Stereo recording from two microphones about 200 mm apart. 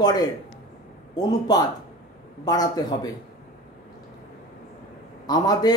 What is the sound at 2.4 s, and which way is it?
Speech, 20° left (ahead or behind).